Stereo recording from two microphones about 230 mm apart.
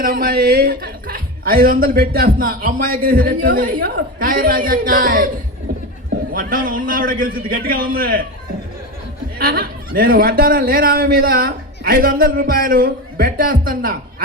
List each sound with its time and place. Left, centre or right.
0.0 s a man's voice: right
6.3 s a man's voice: right
9.4 s a man's voice: right